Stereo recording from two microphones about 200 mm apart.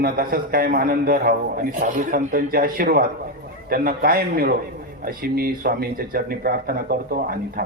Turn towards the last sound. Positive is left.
turn(degrees=-45)  # may be behind; listen again after turning